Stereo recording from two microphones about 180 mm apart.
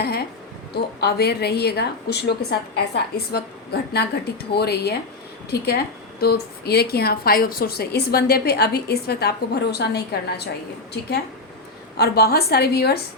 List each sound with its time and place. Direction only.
0.9 s a woman's voice: 65° left (ahead or behind)